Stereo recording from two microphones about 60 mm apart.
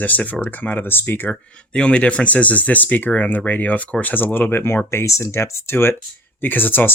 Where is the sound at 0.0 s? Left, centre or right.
Left.